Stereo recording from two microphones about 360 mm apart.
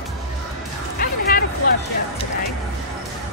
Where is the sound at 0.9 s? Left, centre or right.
Left.